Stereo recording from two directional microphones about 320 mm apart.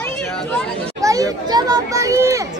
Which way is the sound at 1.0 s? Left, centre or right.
Centre.